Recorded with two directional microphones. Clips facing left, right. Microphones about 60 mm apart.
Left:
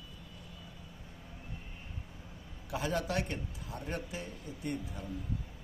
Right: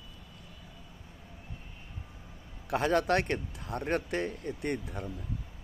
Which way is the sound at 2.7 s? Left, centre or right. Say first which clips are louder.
Right 7 dB; right.